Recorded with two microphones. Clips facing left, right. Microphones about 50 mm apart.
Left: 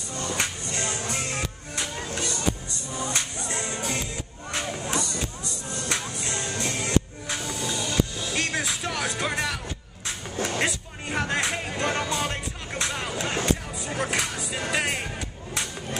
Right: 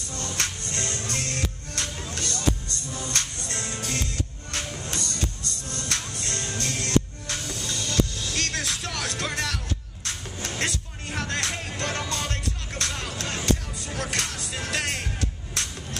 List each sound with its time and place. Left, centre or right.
0.1 s music: centre
10.6 s music: centre